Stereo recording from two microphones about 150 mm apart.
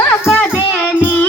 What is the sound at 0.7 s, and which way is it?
Music, 10° left (ahead or behind).